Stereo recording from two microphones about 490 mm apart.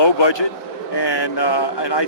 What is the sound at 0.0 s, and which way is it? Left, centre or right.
A man's voice, left.